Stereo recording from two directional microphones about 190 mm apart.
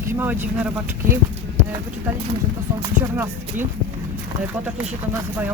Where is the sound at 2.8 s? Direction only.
10° right (ahead or behind).